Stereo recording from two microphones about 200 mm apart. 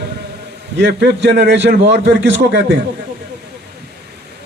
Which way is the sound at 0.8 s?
60° right (ahead or behind).